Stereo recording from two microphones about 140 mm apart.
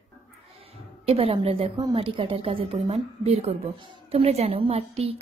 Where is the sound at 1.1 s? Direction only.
45° right (ahead or behind).